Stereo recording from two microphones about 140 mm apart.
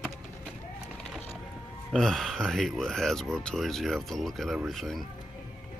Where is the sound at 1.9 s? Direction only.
Centre (ahead or behind).